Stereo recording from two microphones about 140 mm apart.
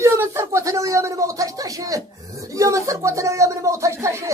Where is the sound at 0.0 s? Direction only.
20° right (ahead or behind).